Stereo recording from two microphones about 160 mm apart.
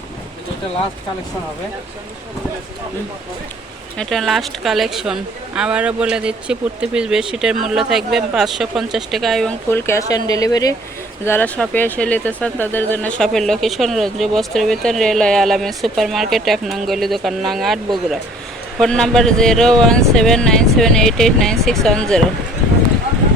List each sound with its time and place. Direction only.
3.9 s speech: 5° left (ahead or behind)
9.6 s speech: 15° left (ahead or behind)
11.3 s speech: 10° left (ahead or behind)